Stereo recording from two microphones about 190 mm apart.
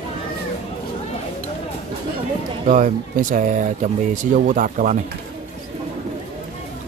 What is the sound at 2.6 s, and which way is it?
Speech, 40° right (ahead or behind).